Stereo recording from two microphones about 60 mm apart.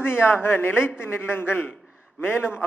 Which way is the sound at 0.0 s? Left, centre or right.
Left.